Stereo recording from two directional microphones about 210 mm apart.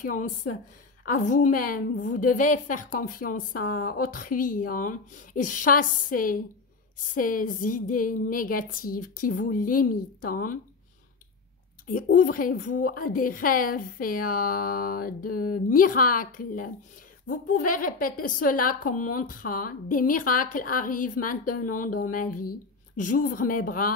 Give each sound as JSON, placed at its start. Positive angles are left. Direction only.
{"t": 1.0, "sound": "a woman's voice", "side_deg": 40}
{"t": 11.9, "sound": "a woman's voice", "side_deg": 40}